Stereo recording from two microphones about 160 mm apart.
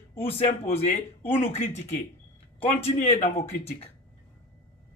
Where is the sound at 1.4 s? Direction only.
45° left (ahead or behind).